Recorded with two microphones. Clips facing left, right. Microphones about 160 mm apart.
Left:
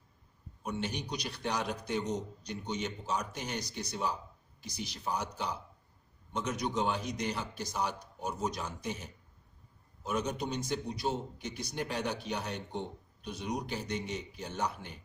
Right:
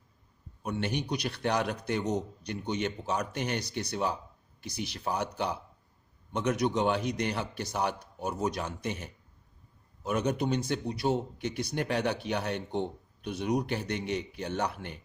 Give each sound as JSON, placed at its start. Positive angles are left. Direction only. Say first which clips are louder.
{"t": 0.6, "sound": "a man's voice", "louder": "right 4 dB", "side_deg": -60}